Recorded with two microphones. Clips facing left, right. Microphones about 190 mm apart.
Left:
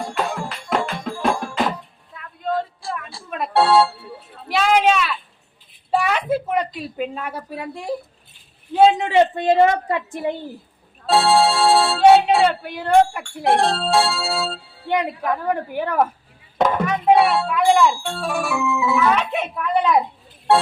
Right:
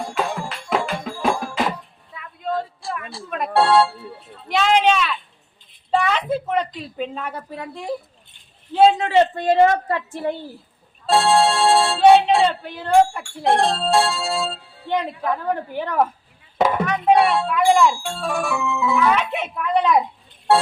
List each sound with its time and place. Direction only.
0.0 s music: centre (ahead or behind)
4.4 s a woman's voice: 5° left (ahead or behind)
11.0 s speech: centre (ahead or behind)
14.8 s a woman's voice: 15° left (ahead or behind)
20.5 s music: centre (ahead or behind)